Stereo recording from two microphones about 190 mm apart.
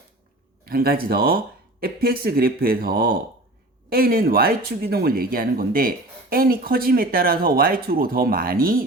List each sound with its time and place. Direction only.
0.6 s speech: 50° right (ahead or behind)